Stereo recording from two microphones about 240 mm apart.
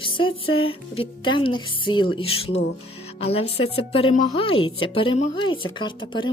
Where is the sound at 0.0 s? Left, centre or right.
Left.